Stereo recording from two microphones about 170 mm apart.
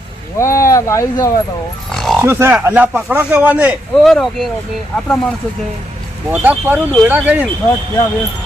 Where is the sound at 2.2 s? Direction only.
10° right (ahead or behind).